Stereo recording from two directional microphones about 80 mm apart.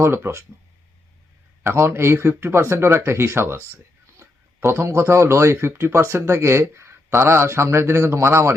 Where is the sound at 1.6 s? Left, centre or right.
Right.